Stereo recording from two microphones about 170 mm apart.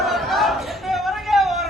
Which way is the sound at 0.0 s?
Centre (ahead or behind).